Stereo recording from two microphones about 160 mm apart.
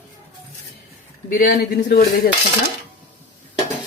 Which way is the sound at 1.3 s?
60° left (ahead or behind).